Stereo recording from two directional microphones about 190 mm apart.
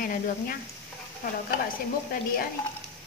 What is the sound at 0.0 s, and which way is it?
Speech, 50° left (ahead or behind).